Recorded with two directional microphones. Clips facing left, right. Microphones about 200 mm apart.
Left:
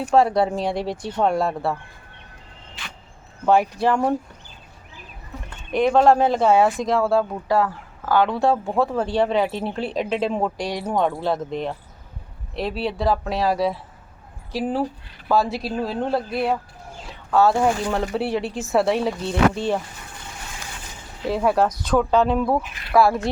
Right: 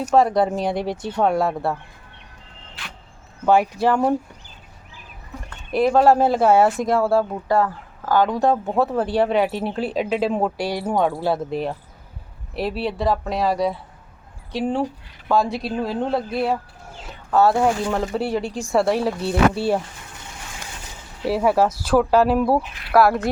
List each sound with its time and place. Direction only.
0.1 s speech: centre (ahead or behind)
3.4 s speech: centre (ahead or behind)
5.7 s speech: 5° right (ahead or behind)
21.2 s speech: 5° right (ahead or behind)